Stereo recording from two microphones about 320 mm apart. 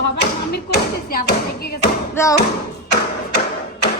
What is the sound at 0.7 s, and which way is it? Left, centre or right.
Thump, left.